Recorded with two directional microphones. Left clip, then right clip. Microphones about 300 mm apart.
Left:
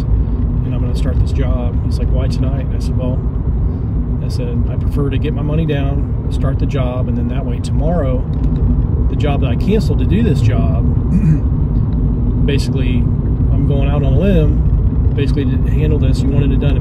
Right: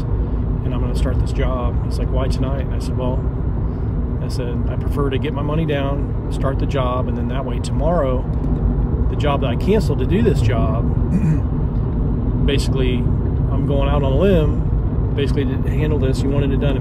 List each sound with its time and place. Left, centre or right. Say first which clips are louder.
5.5 s speech: left 1 dB; centre
9.4 s speech: left 1 dB; centre
12.4 s speech: even; centre